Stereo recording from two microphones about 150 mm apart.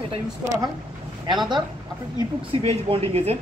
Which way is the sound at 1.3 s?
30° right (ahead or behind).